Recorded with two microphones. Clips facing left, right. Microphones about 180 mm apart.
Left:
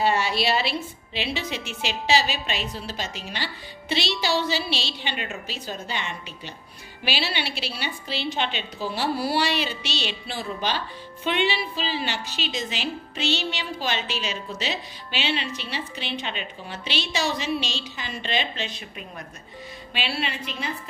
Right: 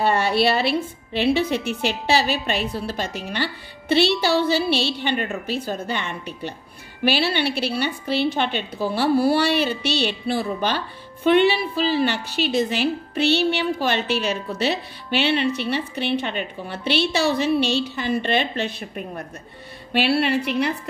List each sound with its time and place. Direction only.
0.0 s a woman's voice: 60° right (ahead or behind)